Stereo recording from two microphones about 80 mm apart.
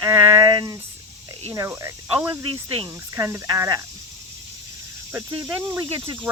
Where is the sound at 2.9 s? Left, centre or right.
Right.